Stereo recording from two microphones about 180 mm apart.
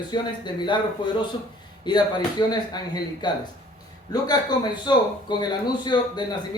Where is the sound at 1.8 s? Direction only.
25° left (ahead or behind).